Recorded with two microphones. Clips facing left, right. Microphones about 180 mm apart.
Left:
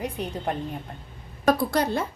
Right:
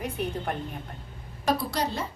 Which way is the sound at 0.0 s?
15° left (ahead or behind).